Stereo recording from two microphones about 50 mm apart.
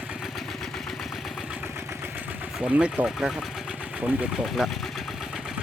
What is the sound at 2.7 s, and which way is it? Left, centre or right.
Speech, right.